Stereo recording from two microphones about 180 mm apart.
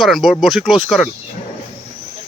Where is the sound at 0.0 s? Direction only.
Centre (ahead or behind).